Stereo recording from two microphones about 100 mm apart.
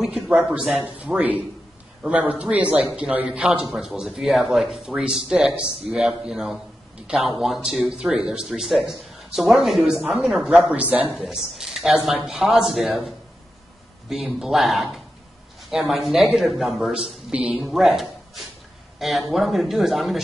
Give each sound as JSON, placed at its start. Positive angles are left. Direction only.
{"t": 0.0, "sound": "speech", "side_deg": -5}
{"t": 10.8, "sound": "speech", "side_deg": -15}
{"t": 11.1, "sound": "speech", "side_deg": -5}
{"t": 15.9, "sound": "speech", "side_deg": 0}
{"t": 17.6, "sound": "speech", "side_deg": 0}